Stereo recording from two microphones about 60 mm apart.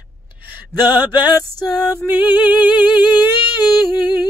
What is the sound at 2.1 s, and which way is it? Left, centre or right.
Music, right.